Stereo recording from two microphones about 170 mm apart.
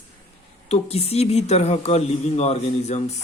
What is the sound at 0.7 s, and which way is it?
A man's voice, 35° left (ahead or behind).